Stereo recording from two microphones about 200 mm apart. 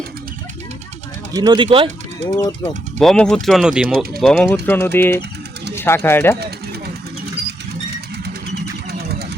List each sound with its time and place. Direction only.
1.3 s speech: 20° right (ahead or behind)
2.3 s speech: 10° left (ahead or behind)
8.5 s a sound: 50° right (ahead or behind)